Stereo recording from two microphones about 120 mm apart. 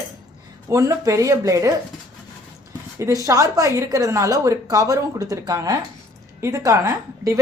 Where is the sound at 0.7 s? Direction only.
25° right (ahead or behind).